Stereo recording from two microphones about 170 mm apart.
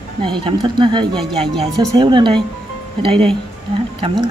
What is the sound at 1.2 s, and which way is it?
Speech, centre (ahead or behind).